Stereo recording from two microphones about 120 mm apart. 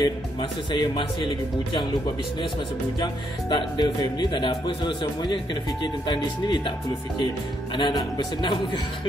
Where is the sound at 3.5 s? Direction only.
40° left (ahead or behind).